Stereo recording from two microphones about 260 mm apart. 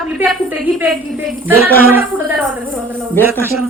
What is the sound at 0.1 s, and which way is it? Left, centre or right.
A woman's voice, centre.